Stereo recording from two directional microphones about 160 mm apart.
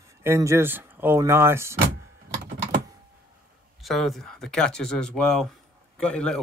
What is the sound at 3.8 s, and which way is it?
Speech, centre (ahead or behind).